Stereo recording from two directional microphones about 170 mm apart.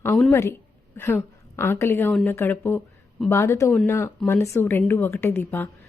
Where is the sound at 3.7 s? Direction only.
5° left (ahead or behind).